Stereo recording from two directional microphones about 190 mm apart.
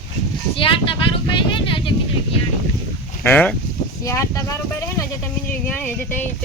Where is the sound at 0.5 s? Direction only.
25° left (ahead or behind).